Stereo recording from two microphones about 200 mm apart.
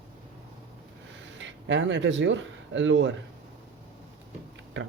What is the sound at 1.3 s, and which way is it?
Speech, 65° right (ahead or behind).